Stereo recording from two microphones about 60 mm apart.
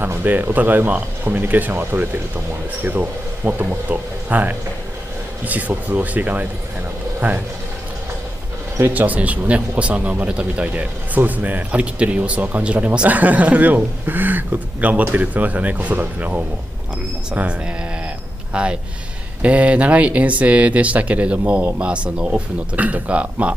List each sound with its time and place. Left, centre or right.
0.2 s a man's voice: right
8.9 s speech: right